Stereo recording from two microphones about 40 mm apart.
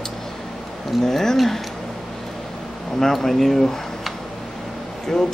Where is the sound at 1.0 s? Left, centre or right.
Centre.